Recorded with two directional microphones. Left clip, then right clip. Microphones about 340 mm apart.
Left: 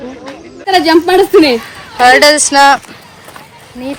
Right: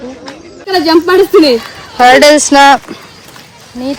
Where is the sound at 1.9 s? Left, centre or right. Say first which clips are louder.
Right 2 dB; centre.